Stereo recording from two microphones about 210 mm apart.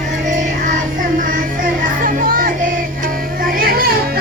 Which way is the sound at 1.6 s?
40° right (ahead or behind).